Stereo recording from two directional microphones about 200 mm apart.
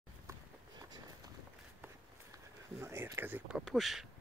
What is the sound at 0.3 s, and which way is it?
Run, 20° right (ahead or behind).